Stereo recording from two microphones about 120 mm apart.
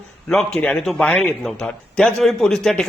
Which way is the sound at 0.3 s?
5° left (ahead or behind).